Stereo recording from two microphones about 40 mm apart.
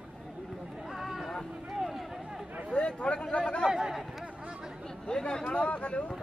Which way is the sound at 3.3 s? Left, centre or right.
Left.